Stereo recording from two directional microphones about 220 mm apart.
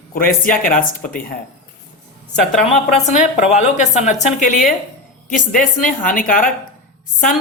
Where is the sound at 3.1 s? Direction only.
35° left (ahead or behind).